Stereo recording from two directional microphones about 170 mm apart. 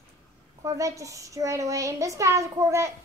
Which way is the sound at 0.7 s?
20° right (ahead or behind).